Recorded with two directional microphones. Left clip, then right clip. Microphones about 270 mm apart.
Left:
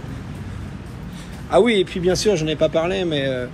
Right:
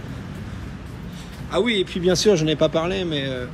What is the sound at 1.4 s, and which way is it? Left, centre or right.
Speech, centre.